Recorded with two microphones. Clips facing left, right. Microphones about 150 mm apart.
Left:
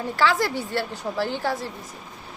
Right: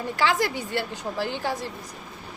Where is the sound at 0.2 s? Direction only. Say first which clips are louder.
Left 2 dB; 15° right (ahead or behind).